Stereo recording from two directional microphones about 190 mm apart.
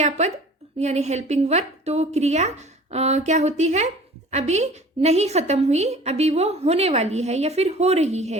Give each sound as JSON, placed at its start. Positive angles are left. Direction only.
{"t": 0.0, "sound": "a woman's voice", "side_deg": -35}